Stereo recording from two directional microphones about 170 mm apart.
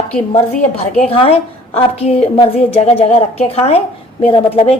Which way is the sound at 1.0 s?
35° left (ahead or behind).